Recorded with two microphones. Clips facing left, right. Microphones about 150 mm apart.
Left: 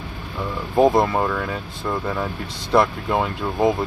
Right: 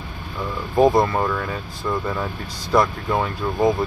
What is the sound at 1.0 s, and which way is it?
Speech, 10° left (ahead or behind).